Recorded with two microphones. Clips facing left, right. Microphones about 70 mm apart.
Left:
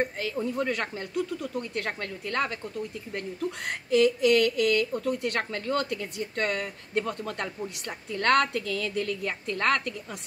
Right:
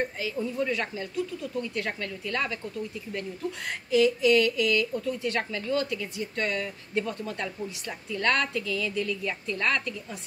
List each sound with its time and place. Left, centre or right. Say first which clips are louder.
0.2 s speech: left 1 dB; left
3.6 s speech: even; left